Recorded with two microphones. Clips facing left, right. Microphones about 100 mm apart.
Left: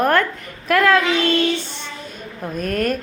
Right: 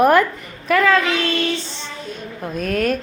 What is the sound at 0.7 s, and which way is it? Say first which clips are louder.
Speech: even; centre (ahead or behind).